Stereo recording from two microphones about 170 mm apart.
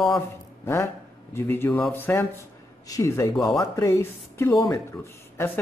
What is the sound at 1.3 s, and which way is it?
Speech, 15° left (ahead or behind).